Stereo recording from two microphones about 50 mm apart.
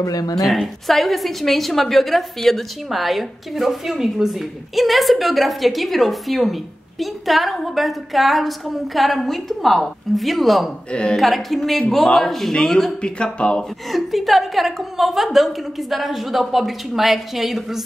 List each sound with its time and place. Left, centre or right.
0.5 s a woman's voice: centre
10.9 s speech: left
11.1 s a woman's voice: centre
13.0 s speech: centre
13.9 s a woman's voice: centre